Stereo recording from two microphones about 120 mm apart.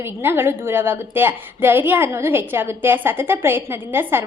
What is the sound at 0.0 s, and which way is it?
A woman's voice, 20° right (ahead or behind).